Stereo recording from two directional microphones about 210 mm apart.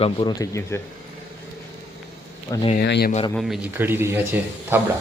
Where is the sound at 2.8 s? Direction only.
50° left (ahead or behind).